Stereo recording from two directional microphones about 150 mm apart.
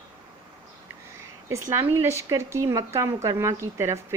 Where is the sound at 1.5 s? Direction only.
20° right (ahead or behind).